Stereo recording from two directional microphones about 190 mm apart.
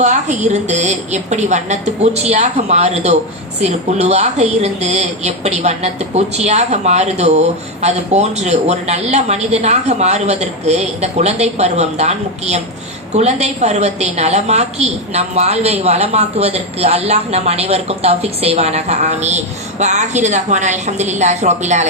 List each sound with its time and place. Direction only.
0.0 s a woman's voice: 40° right (ahead or behind)